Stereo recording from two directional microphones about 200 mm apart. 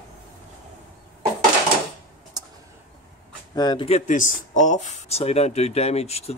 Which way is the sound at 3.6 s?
25° left (ahead or behind).